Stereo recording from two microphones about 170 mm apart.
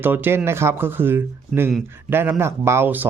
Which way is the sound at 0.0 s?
10° right (ahead or behind).